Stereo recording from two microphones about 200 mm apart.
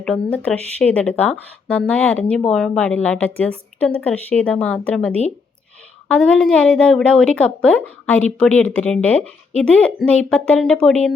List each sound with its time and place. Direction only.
0.0 s a woman's voice: 5° left (ahead or behind)